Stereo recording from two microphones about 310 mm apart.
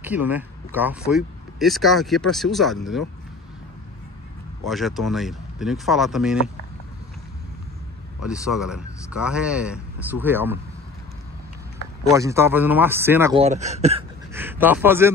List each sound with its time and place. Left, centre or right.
0.0 s speech: centre
4.6 s speech: centre
8.3 s speech: centre
12.1 s speech: centre
13.4 s speech: right
14.3 s speech: centre